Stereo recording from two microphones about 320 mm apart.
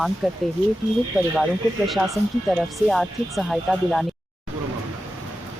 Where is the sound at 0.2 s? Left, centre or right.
Centre.